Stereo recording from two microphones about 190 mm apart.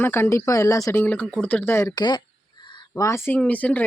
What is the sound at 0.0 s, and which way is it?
Speech, 10° left (ahead or behind).